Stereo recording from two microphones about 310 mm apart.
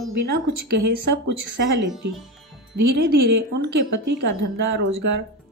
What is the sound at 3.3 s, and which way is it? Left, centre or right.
Speech, right.